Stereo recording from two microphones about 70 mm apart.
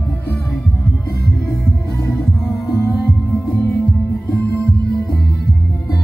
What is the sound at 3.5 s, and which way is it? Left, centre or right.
Music, centre.